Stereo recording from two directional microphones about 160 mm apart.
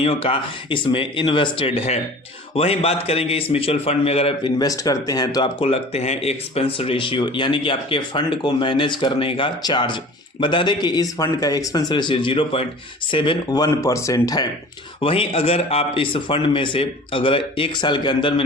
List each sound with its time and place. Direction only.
0.0 s a man's voice: 35° left (ahead or behind)
15.0 s a man's voice: 35° left (ahead or behind)